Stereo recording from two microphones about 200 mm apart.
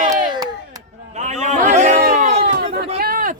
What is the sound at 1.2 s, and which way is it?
Chatter, 35° right (ahead or behind).